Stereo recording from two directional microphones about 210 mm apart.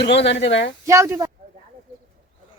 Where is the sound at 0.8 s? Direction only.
15° right (ahead or behind).